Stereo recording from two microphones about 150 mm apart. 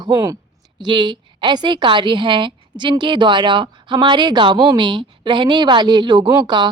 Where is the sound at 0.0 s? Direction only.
25° right (ahead or behind).